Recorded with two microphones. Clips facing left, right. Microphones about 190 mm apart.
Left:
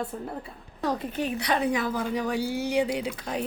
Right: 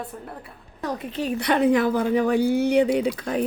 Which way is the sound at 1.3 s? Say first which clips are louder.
Right 9 dB; 55° right (ahead or behind).